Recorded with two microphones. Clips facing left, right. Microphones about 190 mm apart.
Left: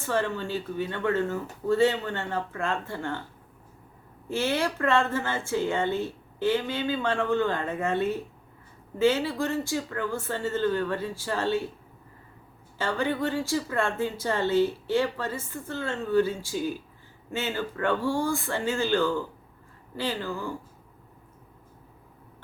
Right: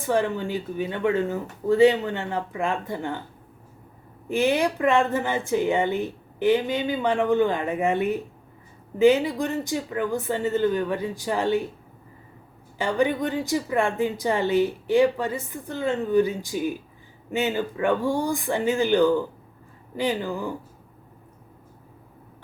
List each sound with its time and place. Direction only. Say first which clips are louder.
0.0 s speech: right 4 dB; 15° right (ahead or behind)
4.3 s speech: right 5 dB; 15° right (ahead or behind)
12.8 s speech: right 4 dB; 15° right (ahead or behind)